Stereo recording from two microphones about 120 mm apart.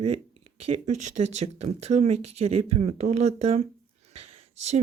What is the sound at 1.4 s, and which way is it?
Speech, 65° right (ahead or behind).